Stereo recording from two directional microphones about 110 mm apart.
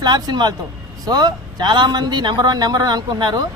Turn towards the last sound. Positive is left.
turn(degrees=-40)  # may be behind; listen again after turning